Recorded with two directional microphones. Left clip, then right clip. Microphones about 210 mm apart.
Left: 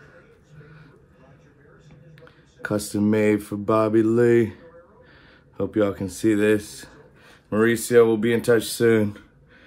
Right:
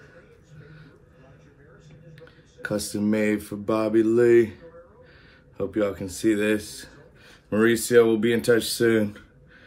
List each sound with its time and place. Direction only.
2.1 s speech: 40° left (ahead or behind)